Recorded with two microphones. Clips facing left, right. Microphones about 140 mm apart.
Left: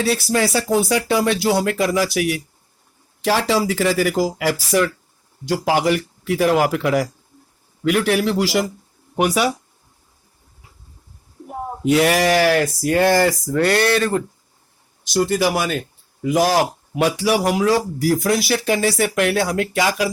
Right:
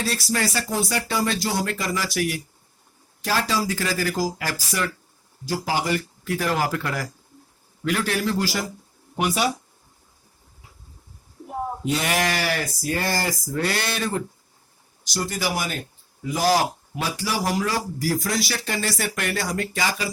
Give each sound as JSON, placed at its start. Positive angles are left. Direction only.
{"t": 0.0, "sound": "speech", "side_deg": 65}
{"t": 5.5, "sound": "speech", "side_deg": 80}
{"t": 9.1, "sound": "speech", "side_deg": 65}
{"t": 11.9, "sound": "speech", "side_deg": 90}
{"t": 15.3, "sound": "speech", "side_deg": 75}
{"t": 16.2, "sound": "speech", "side_deg": 90}
{"t": 16.9, "sound": "speech", "side_deg": 75}